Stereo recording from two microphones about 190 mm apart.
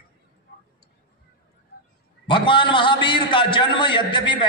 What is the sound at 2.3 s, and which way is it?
A man's voice, 25° left (ahead or behind).